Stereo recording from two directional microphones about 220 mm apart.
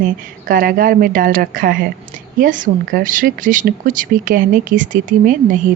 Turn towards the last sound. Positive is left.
turn(degrees=-35)  # may be behind; listen again after turning